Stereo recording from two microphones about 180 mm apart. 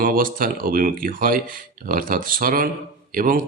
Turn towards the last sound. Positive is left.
turn(degrees=-50)  # may be behind; listen again after turning